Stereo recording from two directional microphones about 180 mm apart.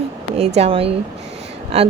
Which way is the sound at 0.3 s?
35° right (ahead or behind).